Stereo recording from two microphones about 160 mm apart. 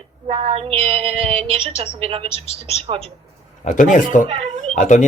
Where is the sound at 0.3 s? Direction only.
35° right (ahead or behind).